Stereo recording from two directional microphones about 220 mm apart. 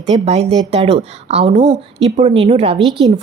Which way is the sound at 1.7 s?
55° right (ahead or behind).